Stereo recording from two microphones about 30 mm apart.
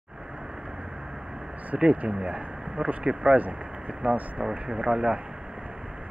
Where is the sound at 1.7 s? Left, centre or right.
Right.